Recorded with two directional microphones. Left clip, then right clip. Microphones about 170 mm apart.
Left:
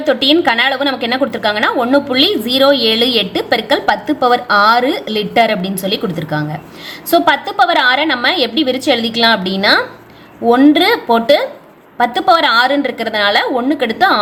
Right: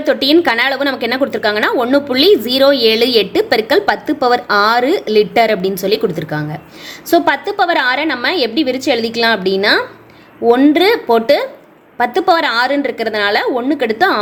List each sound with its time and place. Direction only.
0.0 s a woman's voice: 30° right (ahead or behind)